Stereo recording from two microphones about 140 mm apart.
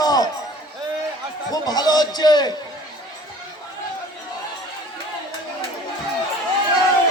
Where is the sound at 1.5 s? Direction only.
30° left (ahead or behind).